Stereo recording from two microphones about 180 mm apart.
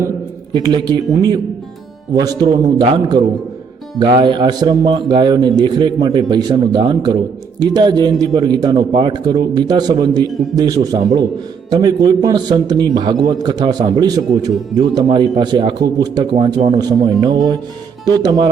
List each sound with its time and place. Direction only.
0.7 s speech: 25° right (ahead or behind)